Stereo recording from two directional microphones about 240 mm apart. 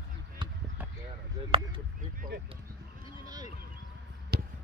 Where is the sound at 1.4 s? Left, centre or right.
Right.